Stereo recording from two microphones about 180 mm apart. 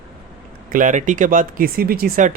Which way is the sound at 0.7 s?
45° right (ahead or behind).